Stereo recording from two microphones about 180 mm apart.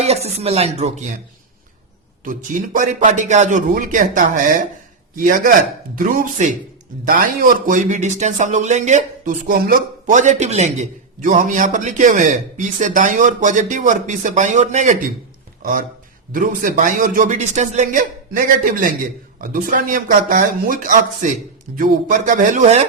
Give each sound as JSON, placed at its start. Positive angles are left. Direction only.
{"t": 0.0, "sound": "speech", "side_deg": -35}
{"t": 2.2, "sound": "a man's voice", "side_deg": -50}
{"t": 15.6, "sound": "a man's voice", "side_deg": -55}